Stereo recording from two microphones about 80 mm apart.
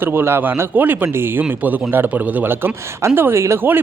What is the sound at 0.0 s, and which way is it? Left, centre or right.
Speech, right.